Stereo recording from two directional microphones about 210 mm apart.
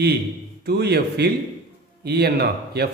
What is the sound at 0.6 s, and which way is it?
A man's voice, 50° right (ahead or behind).